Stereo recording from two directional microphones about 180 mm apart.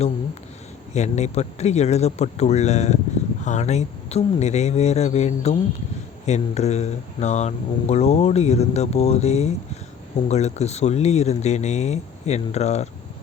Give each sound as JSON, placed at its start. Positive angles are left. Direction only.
{"t": 0.9, "sound": "speech", "side_deg": 40}